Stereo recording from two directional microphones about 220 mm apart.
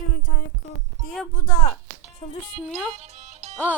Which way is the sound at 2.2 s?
25° left (ahead or behind).